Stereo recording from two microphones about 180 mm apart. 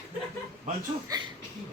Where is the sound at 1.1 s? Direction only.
20° right (ahead or behind).